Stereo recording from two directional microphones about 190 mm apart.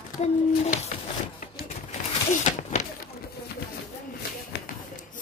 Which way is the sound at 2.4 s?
40° left (ahead or behind).